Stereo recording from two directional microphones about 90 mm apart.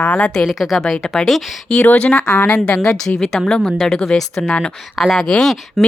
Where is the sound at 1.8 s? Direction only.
15° left (ahead or behind).